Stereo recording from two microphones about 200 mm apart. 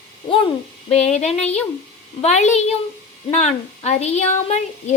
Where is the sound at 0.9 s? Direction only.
35° left (ahead or behind).